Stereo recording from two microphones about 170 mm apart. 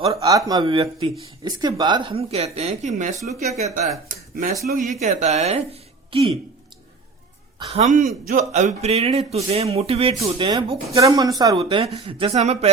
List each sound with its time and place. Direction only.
0.1 s speech: 20° right (ahead or behind)
7.7 s speech: 45° right (ahead or behind)